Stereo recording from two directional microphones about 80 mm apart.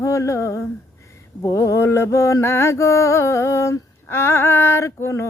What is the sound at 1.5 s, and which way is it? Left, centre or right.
Mantra, left.